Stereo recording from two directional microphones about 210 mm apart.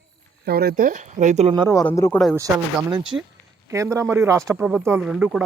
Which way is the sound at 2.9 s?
20° right (ahead or behind).